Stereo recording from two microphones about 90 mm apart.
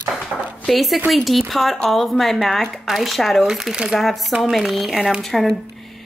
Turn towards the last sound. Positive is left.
turn(degrees=5)  # may be behind; listen again after turning